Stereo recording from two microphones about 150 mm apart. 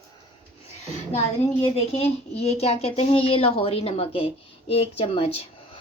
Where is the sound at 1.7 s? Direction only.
40° left (ahead or behind).